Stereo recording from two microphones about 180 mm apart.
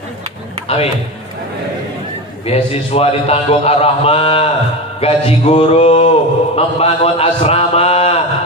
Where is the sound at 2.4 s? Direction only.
35° left (ahead or behind).